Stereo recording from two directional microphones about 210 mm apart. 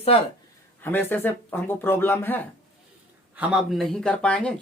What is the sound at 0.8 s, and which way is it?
Speech, 10° left (ahead or behind).